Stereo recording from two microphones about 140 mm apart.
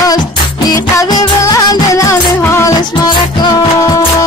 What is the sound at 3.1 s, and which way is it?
Music, 30° left (ahead or behind).